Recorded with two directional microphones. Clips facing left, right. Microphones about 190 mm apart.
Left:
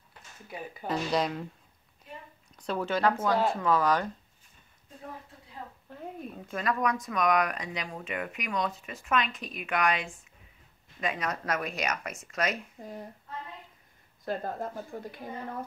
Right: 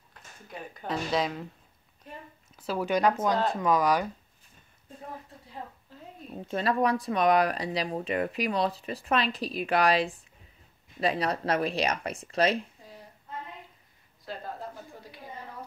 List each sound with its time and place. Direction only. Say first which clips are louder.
0.5 s speech: left 1 dB; 5° left (ahead or behind)
2.5 s speech: right 2 dB; 5° right (ahead or behind)
5.9 s speech: left 5 dB; 55° left (ahead or behind)
6.3 s speech: right 5 dB; 30° right (ahead or behind)
12.8 s a sound: left 8 dB; 55° left (ahead or behind)
14.2 s a woman's voice: left 5 dB; 50° left (ahead or behind)